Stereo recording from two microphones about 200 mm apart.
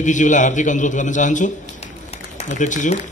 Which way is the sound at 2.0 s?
35° left (ahead or behind).